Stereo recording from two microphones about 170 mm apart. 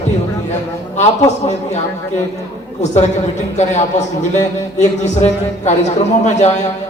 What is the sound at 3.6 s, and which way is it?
A man's voice, 40° left (ahead or behind).